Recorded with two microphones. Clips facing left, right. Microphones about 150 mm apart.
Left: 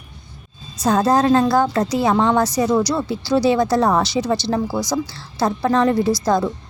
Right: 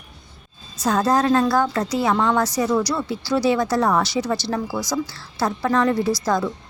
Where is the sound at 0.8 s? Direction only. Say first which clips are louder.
Left 3 dB; 25° left (ahead or behind).